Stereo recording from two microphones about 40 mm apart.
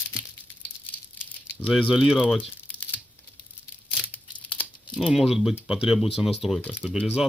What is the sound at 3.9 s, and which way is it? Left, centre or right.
Tearing, left.